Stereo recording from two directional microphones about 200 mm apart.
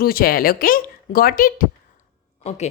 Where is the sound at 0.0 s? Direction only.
45° left (ahead or behind).